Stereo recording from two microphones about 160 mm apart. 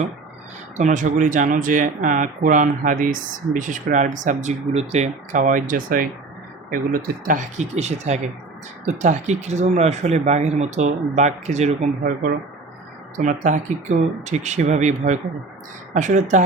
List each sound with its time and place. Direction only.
0.8 s speech: 50° right (ahead or behind)
13.1 s speech: 50° right (ahead or behind)